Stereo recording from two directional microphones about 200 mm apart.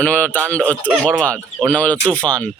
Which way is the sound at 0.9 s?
5° right (ahead or behind).